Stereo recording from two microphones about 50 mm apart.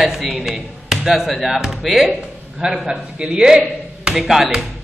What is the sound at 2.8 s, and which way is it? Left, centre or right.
Speech, centre.